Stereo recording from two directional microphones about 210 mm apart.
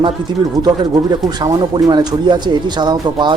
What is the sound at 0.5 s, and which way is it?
Speech, 20° right (ahead or behind).